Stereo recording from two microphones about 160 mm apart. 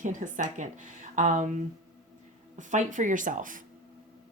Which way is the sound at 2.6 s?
50° right (ahead or behind).